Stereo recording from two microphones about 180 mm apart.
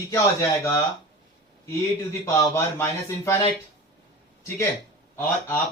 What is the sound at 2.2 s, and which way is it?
Speech, 15° left (ahead or behind).